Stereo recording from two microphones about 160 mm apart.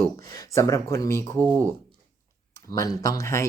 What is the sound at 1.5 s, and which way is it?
Speech, 15° right (ahead or behind).